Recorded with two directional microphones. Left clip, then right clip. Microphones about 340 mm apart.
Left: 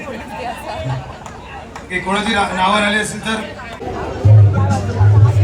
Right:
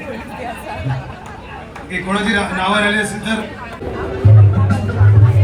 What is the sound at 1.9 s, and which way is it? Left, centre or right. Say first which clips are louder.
A man's voice: even; left.